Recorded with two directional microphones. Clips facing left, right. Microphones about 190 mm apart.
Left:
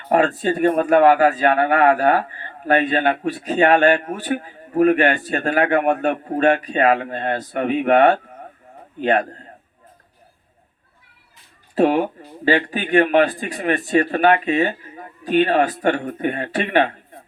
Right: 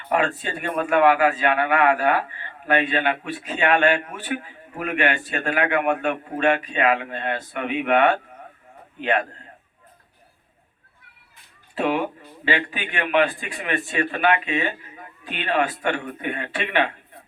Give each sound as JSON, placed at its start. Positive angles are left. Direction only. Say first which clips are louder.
{"t": 0.1, "sound": "speech", "louder": "left 6 dB", "side_deg": 40}
{"t": 11.7, "sound": "speech", "louder": "left 6 dB", "side_deg": 40}